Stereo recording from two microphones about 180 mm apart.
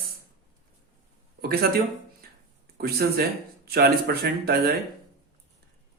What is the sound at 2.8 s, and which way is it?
Speech, 60° right (ahead or behind).